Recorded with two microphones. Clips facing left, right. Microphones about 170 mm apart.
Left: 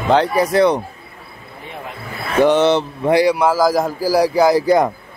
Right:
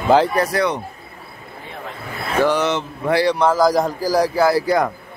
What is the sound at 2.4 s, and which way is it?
Speech, 25° left (ahead or behind).